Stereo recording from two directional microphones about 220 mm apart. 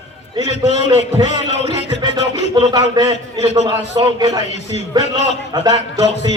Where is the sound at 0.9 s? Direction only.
20° right (ahead or behind).